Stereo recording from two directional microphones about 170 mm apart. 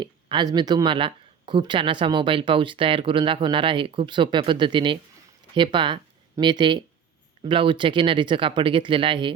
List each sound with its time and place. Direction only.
0.0 s speech: 25° right (ahead or behind)